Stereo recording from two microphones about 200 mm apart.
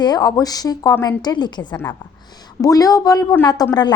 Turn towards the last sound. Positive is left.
turn(degrees=20)  # may be behind; listen again after turning